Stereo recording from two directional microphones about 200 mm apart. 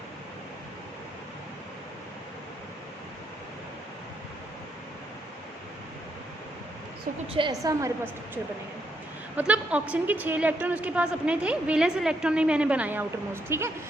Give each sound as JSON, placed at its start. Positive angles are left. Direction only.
{"t": 7.3, "sound": "a woman's voice", "side_deg": -20}
{"t": 9.3, "sound": "a woman's voice", "side_deg": -5}